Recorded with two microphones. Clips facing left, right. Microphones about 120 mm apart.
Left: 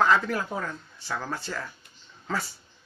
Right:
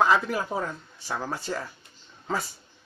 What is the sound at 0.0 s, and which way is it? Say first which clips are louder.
Speech: even; 15° right (ahead or behind).